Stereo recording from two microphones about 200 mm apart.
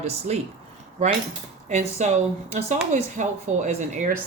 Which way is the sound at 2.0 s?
35° right (ahead or behind).